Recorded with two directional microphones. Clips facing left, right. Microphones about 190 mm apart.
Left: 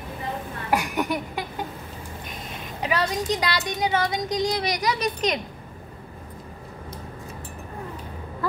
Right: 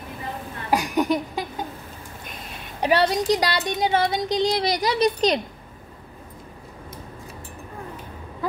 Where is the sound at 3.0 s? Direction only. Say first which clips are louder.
Right 4 dB; 75° right (ahead or behind).